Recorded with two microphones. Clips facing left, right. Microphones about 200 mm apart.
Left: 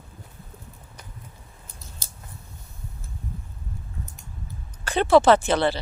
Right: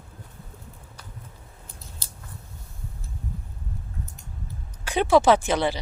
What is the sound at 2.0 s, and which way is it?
Scissors, 45° left (ahead or behind).